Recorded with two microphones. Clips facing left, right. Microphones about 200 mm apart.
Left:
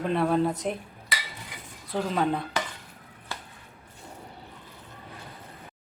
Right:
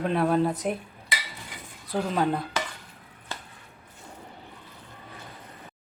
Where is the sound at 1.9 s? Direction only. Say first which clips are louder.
Right 1 dB; 5° right (ahead or behind).